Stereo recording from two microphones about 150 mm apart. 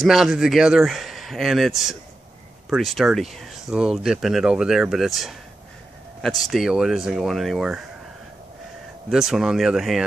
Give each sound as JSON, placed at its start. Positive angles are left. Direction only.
{"t": 0.0, "sound": "speech", "side_deg": 0}
{"t": 9.1, "sound": "speech", "side_deg": -5}